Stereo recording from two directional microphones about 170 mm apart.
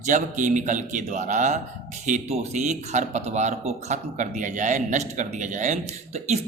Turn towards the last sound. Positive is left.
turn(degrees=-40)  # may be behind; listen again after turning